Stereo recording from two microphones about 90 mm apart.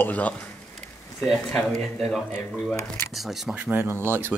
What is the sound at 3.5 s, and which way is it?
Speech, 20° right (ahead or behind).